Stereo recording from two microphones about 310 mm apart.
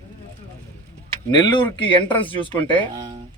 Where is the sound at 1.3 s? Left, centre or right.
Centre.